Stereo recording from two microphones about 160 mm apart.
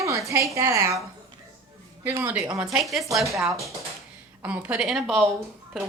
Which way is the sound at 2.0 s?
15° right (ahead or behind).